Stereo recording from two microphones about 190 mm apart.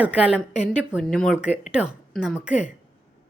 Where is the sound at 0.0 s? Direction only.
5° right (ahead or behind).